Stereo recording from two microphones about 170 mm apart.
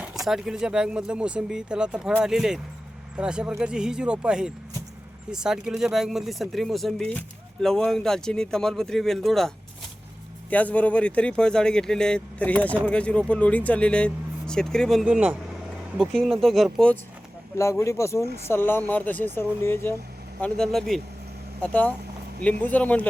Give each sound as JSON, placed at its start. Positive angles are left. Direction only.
{"t": 0.0, "sound": "speech", "side_deg": 0}
{"t": 10.5, "sound": "speech", "side_deg": 10}
{"t": 17.6, "sound": "speech", "side_deg": 15}
{"t": 20.4, "sound": "speech", "side_deg": 5}